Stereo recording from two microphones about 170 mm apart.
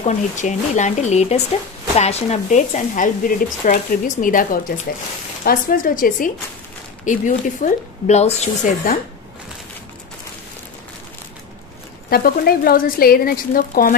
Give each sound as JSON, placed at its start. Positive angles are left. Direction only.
{"t": 0.0, "sound": "speech", "side_deg": 45}
{"t": 8.9, "sound": "speech", "side_deg": 55}
{"t": 12.1, "sound": "speech", "side_deg": 65}